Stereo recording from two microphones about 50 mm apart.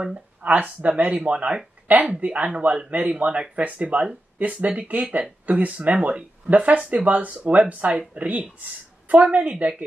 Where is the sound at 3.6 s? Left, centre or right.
Right.